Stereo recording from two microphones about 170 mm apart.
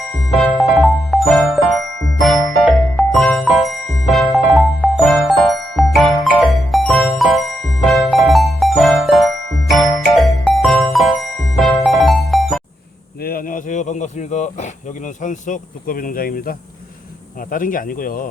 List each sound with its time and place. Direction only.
0.3 s music: centre (ahead or behind)
13.2 s snake: 60° left (ahead or behind)
17.5 s speech: 55° left (ahead or behind)